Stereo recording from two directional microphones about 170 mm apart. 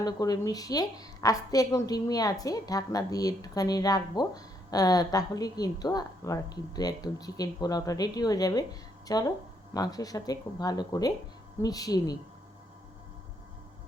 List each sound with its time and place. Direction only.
0.0 s a woman's voice: 20° left (ahead or behind)